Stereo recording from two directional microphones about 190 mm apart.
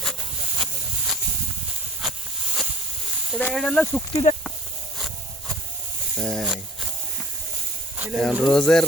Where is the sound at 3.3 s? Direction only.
5° left (ahead or behind).